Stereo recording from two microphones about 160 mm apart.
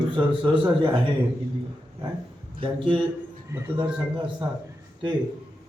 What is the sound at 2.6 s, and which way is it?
Speech, 30° right (ahead or behind).